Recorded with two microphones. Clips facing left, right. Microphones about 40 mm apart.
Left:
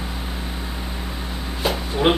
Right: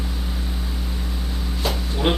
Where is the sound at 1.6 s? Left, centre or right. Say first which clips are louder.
Left 4 dB; centre.